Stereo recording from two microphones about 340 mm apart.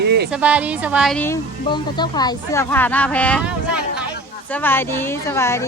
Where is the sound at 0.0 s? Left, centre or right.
Right.